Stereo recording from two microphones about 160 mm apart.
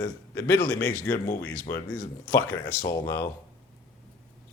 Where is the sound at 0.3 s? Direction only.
15° left (ahead or behind).